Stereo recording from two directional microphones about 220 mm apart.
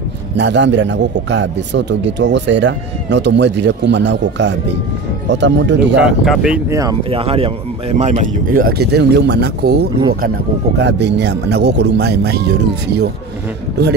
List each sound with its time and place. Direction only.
0.4 s speech: 55° right (ahead or behind)
5.9 s speech: centre (ahead or behind)
6.7 s speech: 15° right (ahead or behind); by 13.1 s 50° right (ahead or behind)